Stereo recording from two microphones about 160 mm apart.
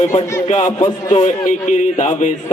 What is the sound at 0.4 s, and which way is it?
A man's voice, 50° left (ahead or behind).